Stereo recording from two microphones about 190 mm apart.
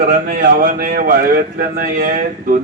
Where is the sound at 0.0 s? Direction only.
45° right (ahead or behind).